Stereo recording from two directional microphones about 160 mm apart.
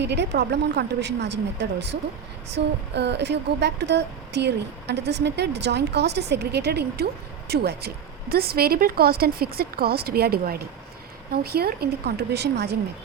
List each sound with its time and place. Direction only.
0.0 s speech: 90° right